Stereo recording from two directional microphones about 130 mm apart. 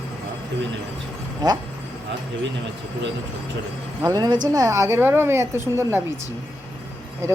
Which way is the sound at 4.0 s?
30° right (ahead or behind).